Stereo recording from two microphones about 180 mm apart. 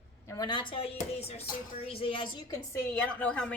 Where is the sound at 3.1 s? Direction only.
5° left (ahead or behind).